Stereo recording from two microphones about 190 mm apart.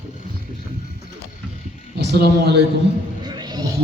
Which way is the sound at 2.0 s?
60° right (ahead or behind).